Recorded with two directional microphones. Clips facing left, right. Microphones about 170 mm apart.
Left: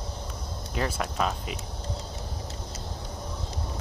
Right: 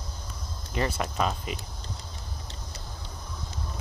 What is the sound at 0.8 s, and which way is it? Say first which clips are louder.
Speech: right 1 dB; centre (ahead or behind).